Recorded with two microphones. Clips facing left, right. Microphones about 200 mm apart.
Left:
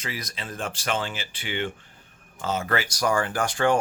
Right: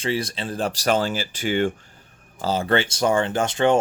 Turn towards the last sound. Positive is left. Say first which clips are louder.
# right 4 dB
turn(degrees=-20)  # may be behind; listen again after turning